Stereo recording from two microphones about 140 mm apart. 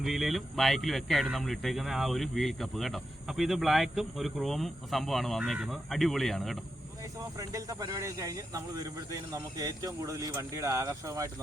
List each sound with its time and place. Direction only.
0.0 s speech: centre (ahead or behind)
7.0 s speech: 25° right (ahead or behind)